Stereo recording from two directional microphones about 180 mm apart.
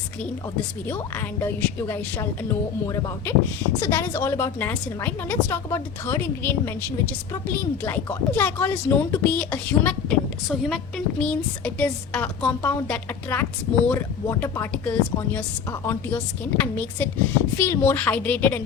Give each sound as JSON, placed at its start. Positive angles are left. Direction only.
{"t": 0.9, "sound": "a woman's voice", "side_deg": 10}